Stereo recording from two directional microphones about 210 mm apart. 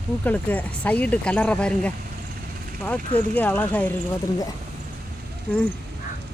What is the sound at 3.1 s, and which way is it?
Speech, 10° left (ahead or behind).